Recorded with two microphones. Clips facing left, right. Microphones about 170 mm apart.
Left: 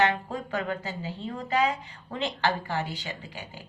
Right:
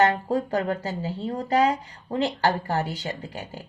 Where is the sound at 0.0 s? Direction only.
40° right (ahead or behind).